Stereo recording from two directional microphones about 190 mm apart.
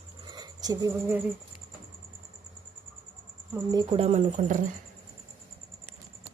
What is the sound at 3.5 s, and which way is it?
Speech, 20° right (ahead or behind).